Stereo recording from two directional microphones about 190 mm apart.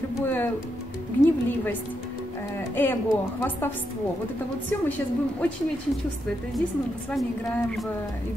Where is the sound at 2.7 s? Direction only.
10° left (ahead or behind).